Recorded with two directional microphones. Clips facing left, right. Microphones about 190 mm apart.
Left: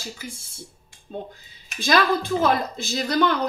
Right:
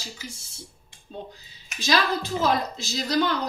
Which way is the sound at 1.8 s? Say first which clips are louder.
Left 4 dB; 55° left (ahead or behind).